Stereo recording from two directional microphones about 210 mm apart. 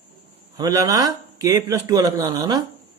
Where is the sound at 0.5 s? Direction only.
15° right (ahead or behind).